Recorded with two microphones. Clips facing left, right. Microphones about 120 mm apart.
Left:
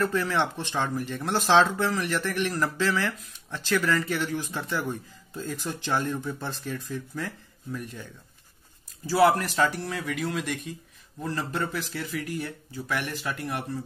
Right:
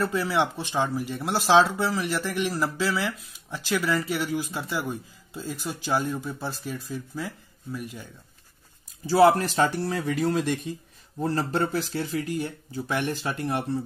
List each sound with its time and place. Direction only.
0.0 s speech: 10° right (ahead or behind)
9.0 s speech: 25° right (ahead or behind)